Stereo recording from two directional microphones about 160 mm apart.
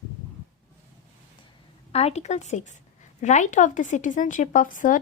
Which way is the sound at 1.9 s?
40° left (ahead or behind).